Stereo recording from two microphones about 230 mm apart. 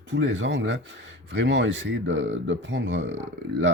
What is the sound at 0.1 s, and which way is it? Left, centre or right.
Speech, right.